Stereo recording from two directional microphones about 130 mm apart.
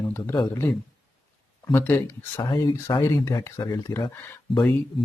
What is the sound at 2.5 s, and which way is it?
Speech, 30° left (ahead or behind).